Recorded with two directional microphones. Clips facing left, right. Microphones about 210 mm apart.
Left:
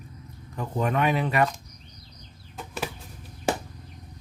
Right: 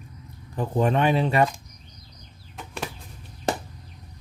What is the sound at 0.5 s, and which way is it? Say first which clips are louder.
Speech: right 4 dB; 30° right (ahead or behind).